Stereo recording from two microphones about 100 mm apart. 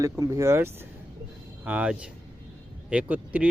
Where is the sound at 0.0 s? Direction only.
35° right (ahead or behind).